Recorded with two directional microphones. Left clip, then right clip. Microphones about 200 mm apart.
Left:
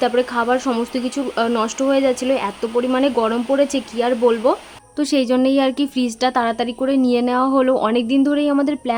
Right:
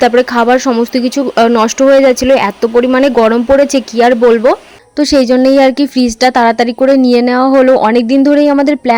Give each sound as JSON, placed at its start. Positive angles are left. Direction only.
{"t": 0.0, "sound": "speech", "side_deg": -30}